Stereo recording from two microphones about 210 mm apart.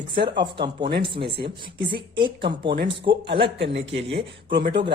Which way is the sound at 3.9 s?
25° right (ahead or behind).